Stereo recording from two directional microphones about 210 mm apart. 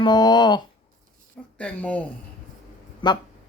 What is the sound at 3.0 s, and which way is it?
Speech, 25° left (ahead or behind).